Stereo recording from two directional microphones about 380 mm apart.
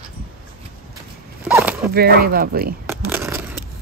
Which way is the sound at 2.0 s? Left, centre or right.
Right.